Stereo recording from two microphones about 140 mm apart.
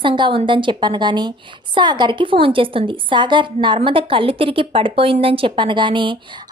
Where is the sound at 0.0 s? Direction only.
35° right (ahead or behind).